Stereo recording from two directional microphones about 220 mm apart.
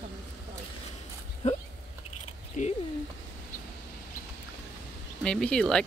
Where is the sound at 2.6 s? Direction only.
35° left (ahead or behind).